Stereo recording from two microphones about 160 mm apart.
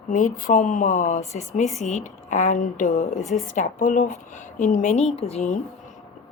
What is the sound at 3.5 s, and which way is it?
Speech, 55° left (ahead or behind).